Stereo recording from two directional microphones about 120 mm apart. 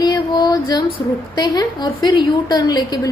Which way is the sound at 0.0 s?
35° left (ahead or behind).